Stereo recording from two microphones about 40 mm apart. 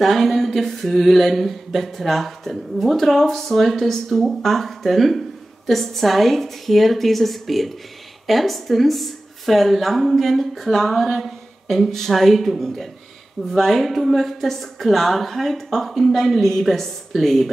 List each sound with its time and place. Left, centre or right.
0.0 s speech: centre